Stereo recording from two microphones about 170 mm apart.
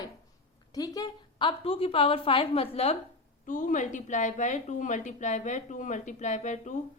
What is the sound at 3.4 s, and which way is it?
A woman's voice, 50° left (ahead or behind).